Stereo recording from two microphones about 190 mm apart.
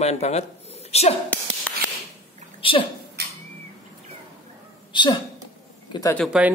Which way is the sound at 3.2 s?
60° right (ahead or behind).